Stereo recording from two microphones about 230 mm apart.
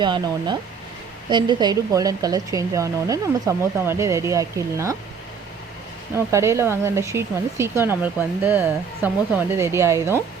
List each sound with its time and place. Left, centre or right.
0.0 s speech: centre
6.1 s speech: centre